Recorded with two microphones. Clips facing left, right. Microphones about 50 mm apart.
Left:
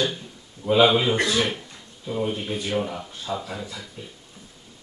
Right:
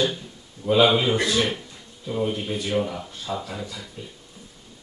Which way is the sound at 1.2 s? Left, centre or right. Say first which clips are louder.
Even; left.